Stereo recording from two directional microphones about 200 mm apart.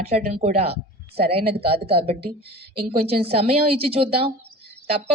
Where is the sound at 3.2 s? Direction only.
30° right (ahead or behind).